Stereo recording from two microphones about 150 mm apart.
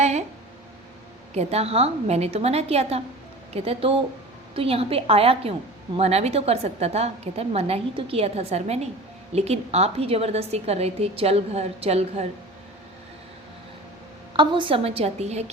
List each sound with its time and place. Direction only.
0.0 s a sound: 50° right (ahead or behind)
1.3 s a woman's voice: 45° right (ahead or behind)
14.3 s a woman's voice: 35° right (ahead or behind)